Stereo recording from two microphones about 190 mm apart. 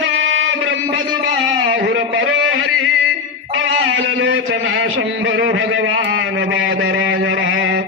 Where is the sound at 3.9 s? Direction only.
90° right.